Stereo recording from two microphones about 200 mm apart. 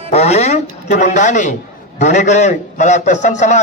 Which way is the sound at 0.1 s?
30° left (ahead or behind).